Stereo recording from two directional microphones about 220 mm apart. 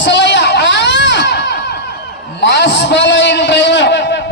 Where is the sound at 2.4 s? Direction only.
50° left (ahead or behind).